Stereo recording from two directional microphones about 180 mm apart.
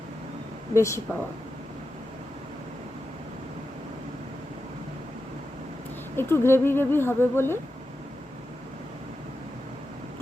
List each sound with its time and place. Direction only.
0.8 s speech: 15° left (ahead or behind)
6.1 s speech: 15° left (ahead or behind)